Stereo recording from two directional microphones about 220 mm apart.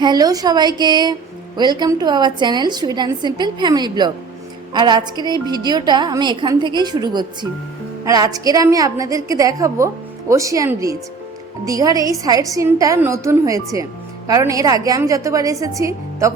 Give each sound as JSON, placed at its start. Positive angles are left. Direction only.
{"t": 0.0, "sound": "a woman's voice", "side_deg": -20}